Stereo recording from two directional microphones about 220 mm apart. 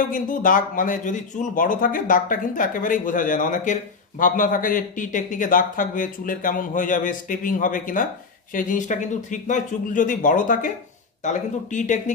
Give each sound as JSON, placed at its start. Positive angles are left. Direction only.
{"t": 0.1, "sound": "a man's voice", "side_deg": 35}